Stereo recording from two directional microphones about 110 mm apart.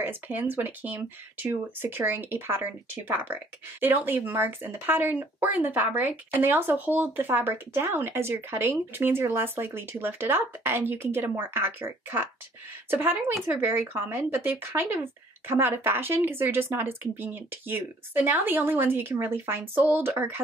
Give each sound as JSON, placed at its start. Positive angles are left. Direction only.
{"t": 0.0, "sound": "speech", "side_deg": -15}